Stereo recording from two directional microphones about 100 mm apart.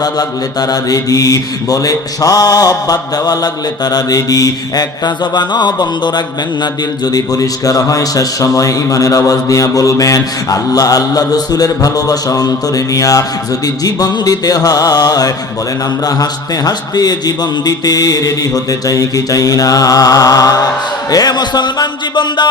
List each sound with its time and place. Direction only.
0.0 s mantra: 40° left (ahead or behind)
21.1 s a man's voice: 40° left (ahead or behind)